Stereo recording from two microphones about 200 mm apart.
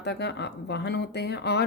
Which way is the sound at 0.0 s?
55° left (ahead or behind).